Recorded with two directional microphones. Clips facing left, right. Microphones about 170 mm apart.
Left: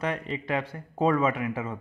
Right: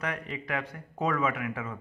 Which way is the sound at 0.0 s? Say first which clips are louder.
Left 5 dB; 25° left (ahead or behind).